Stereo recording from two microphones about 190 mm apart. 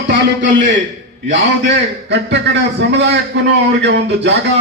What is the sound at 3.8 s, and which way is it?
Speech, 65° right (ahead or behind).